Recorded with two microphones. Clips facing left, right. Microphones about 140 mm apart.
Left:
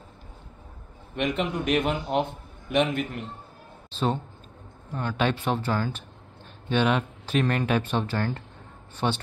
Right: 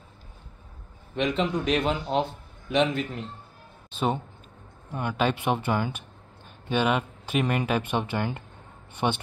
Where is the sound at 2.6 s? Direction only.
60° left (ahead or behind).